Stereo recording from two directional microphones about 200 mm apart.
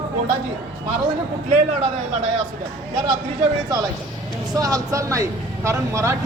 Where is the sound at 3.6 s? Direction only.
20° right (ahead or behind).